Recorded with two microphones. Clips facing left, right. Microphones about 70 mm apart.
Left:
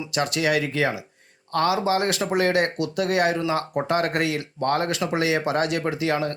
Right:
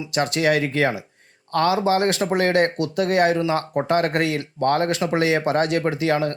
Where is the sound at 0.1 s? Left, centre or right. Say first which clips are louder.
Right 3 dB; right.